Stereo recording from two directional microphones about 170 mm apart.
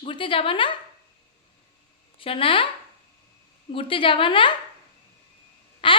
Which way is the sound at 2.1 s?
30° left (ahead or behind).